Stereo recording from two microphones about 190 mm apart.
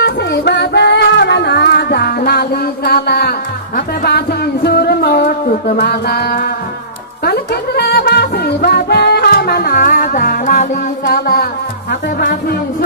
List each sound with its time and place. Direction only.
0.0 s music: 65° left (ahead or behind); by 10.7 s 45° left (ahead or behind)
11.1 s music: 55° left (ahead or behind)